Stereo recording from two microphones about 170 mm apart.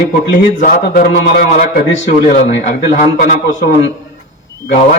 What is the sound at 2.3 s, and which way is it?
Speech, 45° left (ahead or behind).